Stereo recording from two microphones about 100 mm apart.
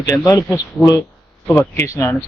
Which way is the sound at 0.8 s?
5° left (ahead or behind).